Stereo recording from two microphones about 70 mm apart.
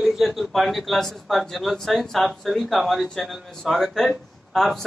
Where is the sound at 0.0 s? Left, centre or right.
Centre.